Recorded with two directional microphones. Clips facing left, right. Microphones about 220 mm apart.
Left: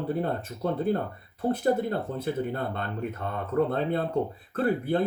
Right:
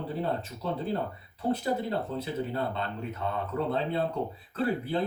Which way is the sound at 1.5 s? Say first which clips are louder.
Left 3 dB; 50° left (ahead or behind).